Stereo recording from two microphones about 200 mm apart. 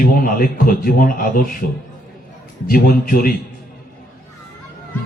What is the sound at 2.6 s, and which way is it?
Speech, 45° left (ahead or behind).